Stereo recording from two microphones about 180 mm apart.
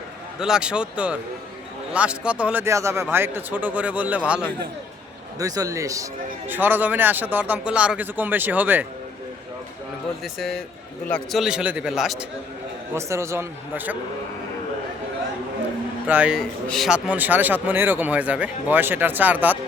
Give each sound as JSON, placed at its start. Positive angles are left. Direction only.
{"t": 0.3, "sound": "speech", "side_deg": -5}
{"t": 5.4, "sound": "speech", "side_deg": -20}
{"t": 10.3, "sound": "speech", "side_deg": 0}
{"t": 12.9, "sound": "speech", "side_deg": -15}
{"t": 16.0, "sound": "speech", "side_deg": -10}